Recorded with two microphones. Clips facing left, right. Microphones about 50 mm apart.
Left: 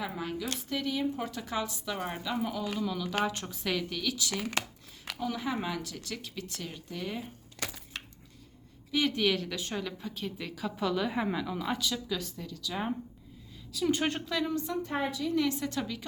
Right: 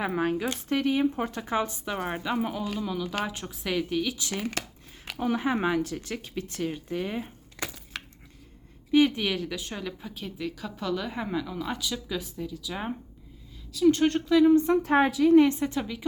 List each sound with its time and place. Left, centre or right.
0.2 s a woman's voice: right
2.7 s speech: centre
5.1 s speech: right
8.9 s a woman's voice: right; by 11.9 s centre
12.0 s speech: centre
13.7 s a woman's voice: centre
14.7 s a woman's voice: right
15.4 s speech: right
15.7 s speech: centre